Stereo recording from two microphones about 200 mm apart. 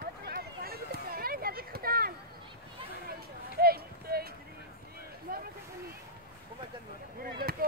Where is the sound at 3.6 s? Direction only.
50° right (ahead or behind).